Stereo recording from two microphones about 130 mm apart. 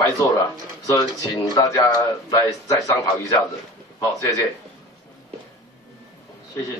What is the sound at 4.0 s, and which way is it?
Speech, 25° left (ahead or behind).